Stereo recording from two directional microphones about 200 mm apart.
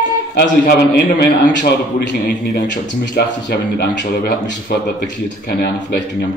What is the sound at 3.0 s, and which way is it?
Speech, 55° left (ahead or behind).